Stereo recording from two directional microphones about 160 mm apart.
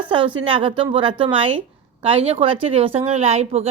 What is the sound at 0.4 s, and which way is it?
A woman's voice, 35° right (ahead or behind).